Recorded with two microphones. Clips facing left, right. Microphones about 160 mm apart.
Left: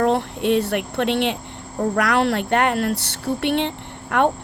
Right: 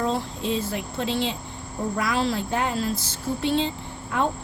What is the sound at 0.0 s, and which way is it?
Speech, 65° left (ahead or behind).